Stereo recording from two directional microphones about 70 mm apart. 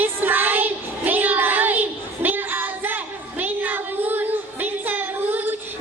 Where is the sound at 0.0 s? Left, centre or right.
Right.